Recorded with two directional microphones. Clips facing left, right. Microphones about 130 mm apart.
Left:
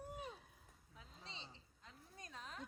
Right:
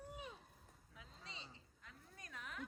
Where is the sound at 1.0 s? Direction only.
30° left (ahead or behind).